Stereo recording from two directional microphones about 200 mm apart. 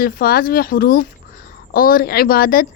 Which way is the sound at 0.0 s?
50° left (ahead or behind).